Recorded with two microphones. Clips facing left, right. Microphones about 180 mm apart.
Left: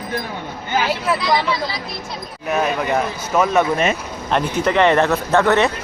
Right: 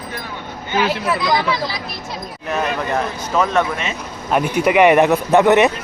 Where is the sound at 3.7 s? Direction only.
50° left (ahead or behind).